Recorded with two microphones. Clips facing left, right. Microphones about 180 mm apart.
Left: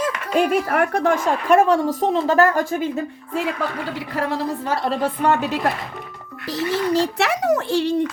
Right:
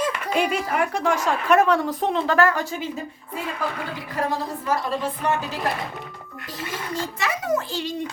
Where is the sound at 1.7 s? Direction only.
45° left (ahead or behind).